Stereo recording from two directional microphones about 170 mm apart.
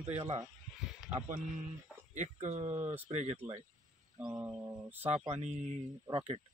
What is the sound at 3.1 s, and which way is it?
Speech, 35° right (ahead or behind).